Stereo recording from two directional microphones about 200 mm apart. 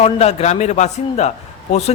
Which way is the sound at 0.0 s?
30° left (ahead or behind).